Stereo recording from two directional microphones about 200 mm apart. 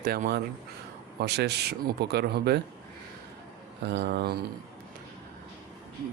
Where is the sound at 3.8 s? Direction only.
60° right (ahead or behind).